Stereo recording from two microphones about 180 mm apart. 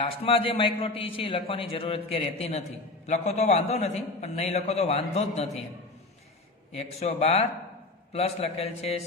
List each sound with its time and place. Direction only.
0.0 s a man's voice: 30° left (ahead or behind)
6.7 s a man's voice: 35° left (ahead or behind)